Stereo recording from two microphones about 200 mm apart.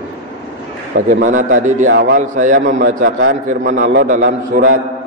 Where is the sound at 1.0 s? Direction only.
40° right (ahead or behind).